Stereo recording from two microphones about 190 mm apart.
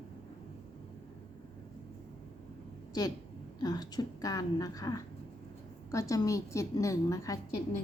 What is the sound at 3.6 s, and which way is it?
A woman's voice, 20° left (ahead or behind).